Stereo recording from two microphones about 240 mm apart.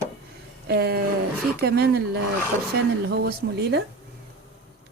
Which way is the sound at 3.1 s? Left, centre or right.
Right.